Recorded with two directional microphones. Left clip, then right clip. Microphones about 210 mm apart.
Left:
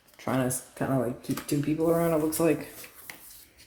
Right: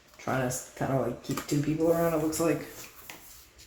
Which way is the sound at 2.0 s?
45° left (ahead or behind).